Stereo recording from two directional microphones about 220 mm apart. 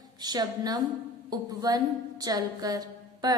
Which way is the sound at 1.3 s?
15° right (ahead or behind).